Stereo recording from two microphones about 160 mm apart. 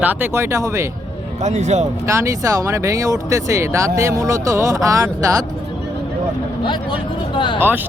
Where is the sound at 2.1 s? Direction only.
20° right (ahead or behind).